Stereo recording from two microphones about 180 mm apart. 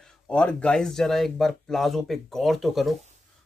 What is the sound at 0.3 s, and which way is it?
Speech, 5° left (ahead or behind).